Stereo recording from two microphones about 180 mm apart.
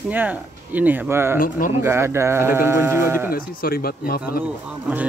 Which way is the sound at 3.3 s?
55° left (ahead or behind).